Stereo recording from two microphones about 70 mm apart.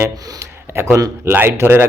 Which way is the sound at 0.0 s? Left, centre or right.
Right.